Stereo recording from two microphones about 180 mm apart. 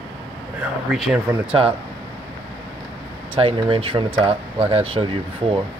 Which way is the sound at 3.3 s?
30° right (ahead or behind).